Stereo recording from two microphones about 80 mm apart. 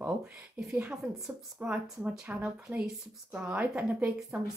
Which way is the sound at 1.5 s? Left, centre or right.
Centre.